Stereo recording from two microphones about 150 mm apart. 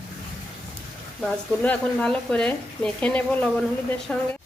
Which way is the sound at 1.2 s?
10° left (ahead or behind).